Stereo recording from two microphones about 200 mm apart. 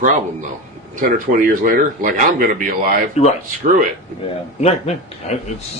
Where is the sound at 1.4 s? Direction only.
45° right (ahead or behind).